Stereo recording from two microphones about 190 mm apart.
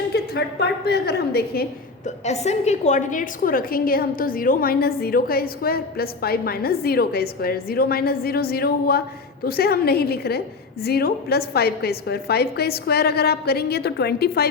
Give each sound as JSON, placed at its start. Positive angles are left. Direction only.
{"t": 0.1, "sound": "a woman's voice", "side_deg": 60}
{"t": 2.0, "sound": "a woman's voice", "side_deg": 35}